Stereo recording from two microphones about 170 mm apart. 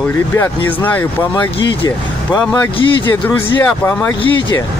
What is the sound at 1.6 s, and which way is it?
Speech, 25° left (ahead or behind).